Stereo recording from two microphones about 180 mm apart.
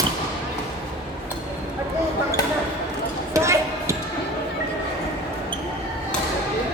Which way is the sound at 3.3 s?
15° right (ahead or behind).